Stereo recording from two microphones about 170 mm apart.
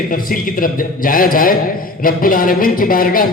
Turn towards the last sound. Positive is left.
turn(degrees=55)  # may be behind; listen again after turning